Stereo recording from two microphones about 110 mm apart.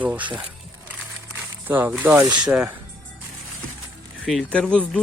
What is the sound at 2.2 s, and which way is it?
Speech, 40° right (ahead or behind).